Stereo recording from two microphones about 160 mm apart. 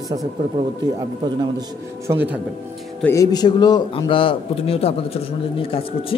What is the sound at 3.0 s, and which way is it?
A man's voice, 20° left (ahead or behind).